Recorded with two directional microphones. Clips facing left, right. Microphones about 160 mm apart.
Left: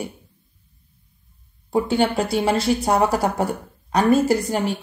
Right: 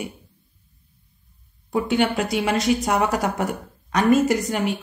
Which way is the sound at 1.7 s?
30° left (ahead or behind).